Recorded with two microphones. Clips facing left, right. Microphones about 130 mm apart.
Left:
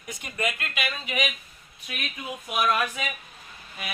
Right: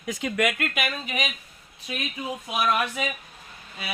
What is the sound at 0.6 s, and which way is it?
Speech, 45° right (ahead or behind).